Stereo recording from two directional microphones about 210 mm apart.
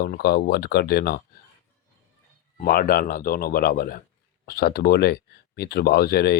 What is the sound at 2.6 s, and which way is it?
Speech, 45° left (ahead or behind).